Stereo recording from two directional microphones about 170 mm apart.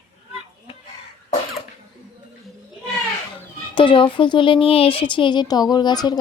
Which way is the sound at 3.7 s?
30° left (ahead or behind).